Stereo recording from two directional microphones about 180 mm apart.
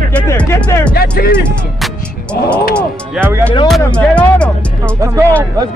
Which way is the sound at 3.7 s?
5° left (ahead or behind).